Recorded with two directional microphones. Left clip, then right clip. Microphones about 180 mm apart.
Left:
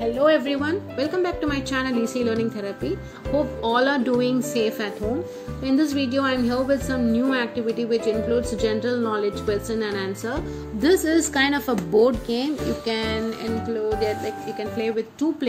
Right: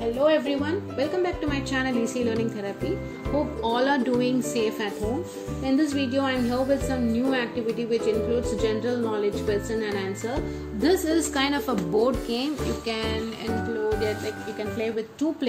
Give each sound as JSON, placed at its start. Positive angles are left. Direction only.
{"t": 0.0, "sound": "a woman's voice", "side_deg": 30}